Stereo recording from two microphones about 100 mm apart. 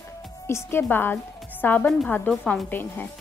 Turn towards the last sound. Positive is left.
turn(degrees=20)  # may be behind; listen again after turning